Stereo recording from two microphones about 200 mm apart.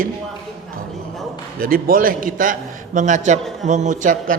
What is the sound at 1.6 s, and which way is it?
A man's voice, 45° right (ahead or behind).